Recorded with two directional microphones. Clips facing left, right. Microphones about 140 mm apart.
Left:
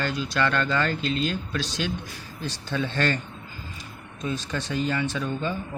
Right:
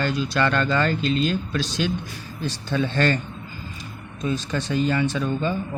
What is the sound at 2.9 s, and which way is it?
Speech, 40° right (ahead or behind).